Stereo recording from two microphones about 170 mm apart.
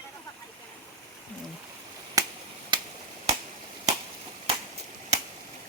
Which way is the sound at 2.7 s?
25° right (ahead or behind).